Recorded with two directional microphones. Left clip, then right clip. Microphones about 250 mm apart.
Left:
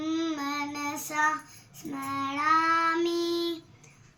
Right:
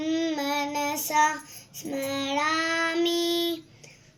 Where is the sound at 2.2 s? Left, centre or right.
Left.